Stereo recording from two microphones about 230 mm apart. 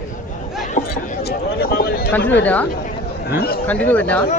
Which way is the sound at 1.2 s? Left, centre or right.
Left.